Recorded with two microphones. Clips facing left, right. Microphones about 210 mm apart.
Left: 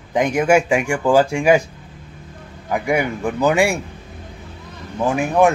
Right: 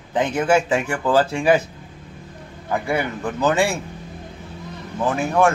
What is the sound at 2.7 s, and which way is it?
Speech, 15° left (ahead or behind).